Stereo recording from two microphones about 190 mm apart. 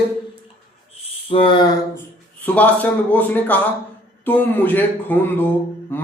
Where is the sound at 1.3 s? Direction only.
25° left (ahead or behind).